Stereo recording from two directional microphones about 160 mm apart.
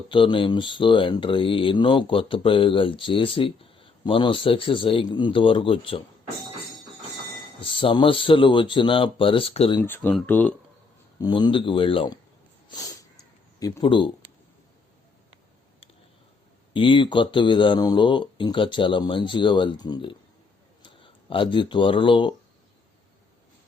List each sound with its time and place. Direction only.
0.1 s speech: 30° left (ahead or behind)
7.6 s speech: 30° left (ahead or behind)
9.8 s speech: 15° left (ahead or behind)
11.2 s speech: 30° left (ahead or behind)
12.6 s a sound: 25° left (ahead or behind)
13.6 s speech: 30° left (ahead or behind)
16.7 s speech: 30° left (ahead or behind)